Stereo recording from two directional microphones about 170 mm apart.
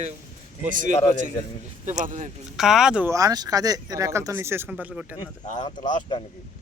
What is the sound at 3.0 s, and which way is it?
Speech, 20° right (ahead or behind).